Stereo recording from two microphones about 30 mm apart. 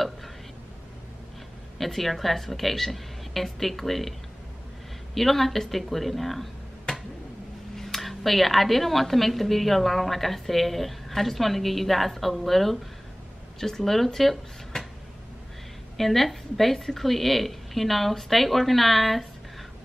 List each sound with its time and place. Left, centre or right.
1.8 s speech: centre
5.1 s speech: centre
6.9 s a sound: left
7.7 s speech: centre
16.0 s speech: centre